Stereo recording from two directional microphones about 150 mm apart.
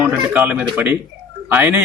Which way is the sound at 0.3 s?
10° right (ahead or behind).